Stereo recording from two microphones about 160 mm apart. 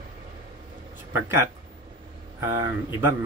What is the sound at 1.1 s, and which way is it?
Speech, 15° right (ahead or behind).